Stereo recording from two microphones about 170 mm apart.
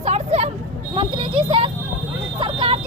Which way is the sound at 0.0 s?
40° right (ahead or behind).